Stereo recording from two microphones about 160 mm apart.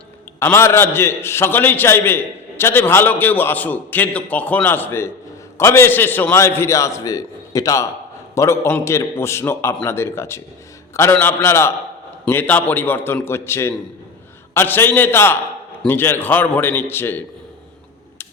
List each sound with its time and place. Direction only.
0.3 s a man's voice: 15° left (ahead or behind)